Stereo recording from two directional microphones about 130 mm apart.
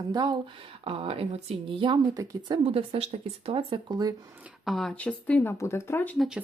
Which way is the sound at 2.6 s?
45° right (ahead or behind).